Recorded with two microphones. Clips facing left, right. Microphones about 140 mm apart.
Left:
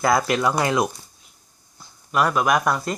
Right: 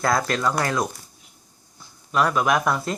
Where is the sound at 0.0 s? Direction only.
5° left (ahead or behind).